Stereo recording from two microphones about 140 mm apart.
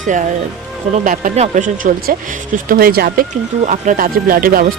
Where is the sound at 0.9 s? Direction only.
70° right (ahead or behind).